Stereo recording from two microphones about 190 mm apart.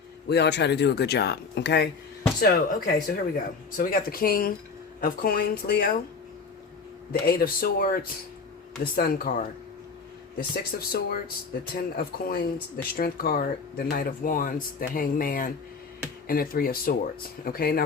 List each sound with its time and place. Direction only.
0.3 s speech: 60° left (ahead or behind)
2.4 s speech: 50° left (ahead or behind)
7.1 s speech: 50° left (ahead or behind)
10.3 s speech: 55° left (ahead or behind)